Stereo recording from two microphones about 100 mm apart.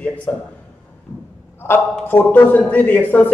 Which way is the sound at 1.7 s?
20° left (ahead or behind).